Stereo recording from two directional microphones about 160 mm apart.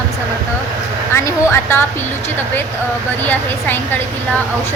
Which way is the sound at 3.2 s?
10° left (ahead or behind).